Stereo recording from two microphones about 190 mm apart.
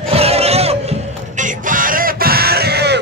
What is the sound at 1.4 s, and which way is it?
Chicken, 45° right (ahead or behind).